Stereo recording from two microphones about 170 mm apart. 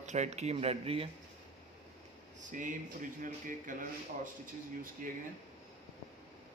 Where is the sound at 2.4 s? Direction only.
50° right (ahead or behind).